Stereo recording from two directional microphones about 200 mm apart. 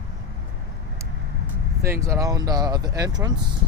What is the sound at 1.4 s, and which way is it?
Speech, 15° right (ahead or behind).